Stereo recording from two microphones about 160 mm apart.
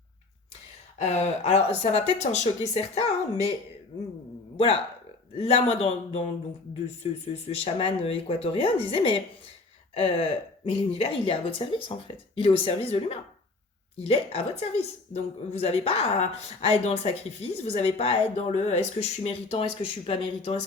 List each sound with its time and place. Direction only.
0.9 s a woman's voice: 45° left (ahead or behind)
4.5 s a woman's voice: 35° left (ahead or behind)